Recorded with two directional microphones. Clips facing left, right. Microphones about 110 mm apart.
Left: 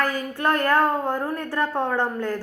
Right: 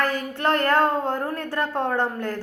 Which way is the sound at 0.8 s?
10° left (ahead or behind).